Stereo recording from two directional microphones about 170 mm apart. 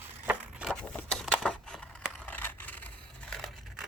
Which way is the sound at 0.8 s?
5° left (ahead or behind).